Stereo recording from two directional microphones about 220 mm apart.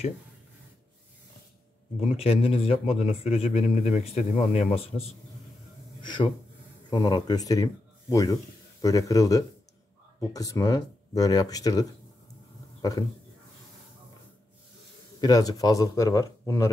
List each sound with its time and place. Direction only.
2.0 s a man's voice: 25° left (ahead or behind)
6.9 s a man's voice: 20° left (ahead or behind)
15.1 s a man's voice: 15° left (ahead or behind)